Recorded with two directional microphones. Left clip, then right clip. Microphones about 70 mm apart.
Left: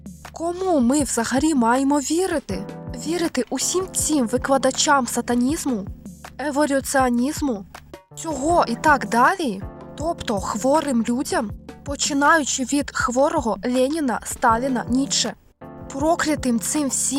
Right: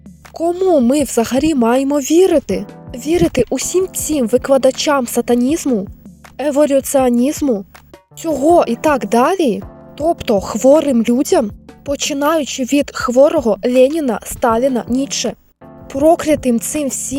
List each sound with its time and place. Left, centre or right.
0.5 s speech: centre
0.9 s speech: right
2.1 s speech: right
2.9 s speech: right
8.2 s speech: right
10.0 s speech: right
11.9 s speech: right